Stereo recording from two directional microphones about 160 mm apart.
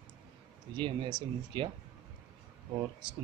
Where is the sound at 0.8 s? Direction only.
30° right (ahead or behind).